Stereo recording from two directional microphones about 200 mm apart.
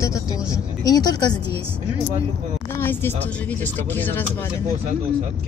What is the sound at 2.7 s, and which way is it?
Speech, 10° left (ahead or behind).